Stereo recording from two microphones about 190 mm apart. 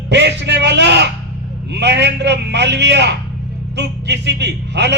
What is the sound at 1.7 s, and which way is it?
Speech, 65° right (ahead or behind).